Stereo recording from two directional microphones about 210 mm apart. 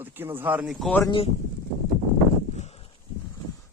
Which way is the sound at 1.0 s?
25° left (ahead or behind).